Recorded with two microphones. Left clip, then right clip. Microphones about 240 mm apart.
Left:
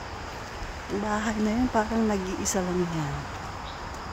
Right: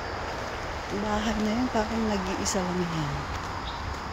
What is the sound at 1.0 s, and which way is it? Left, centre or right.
Speech, centre.